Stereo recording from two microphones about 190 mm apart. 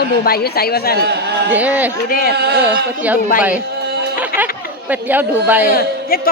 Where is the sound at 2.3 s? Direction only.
60° right (ahead or behind).